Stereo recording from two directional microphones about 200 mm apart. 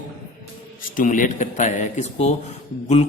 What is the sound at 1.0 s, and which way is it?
Speech, 40° left (ahead or behind).